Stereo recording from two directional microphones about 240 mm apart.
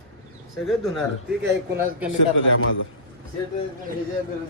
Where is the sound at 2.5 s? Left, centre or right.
Left.